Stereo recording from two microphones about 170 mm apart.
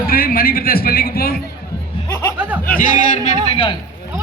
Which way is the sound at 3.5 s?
35° left (ahead or behind).